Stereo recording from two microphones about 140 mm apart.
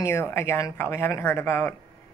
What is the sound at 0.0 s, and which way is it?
Speech, 20° left (ahead or behind).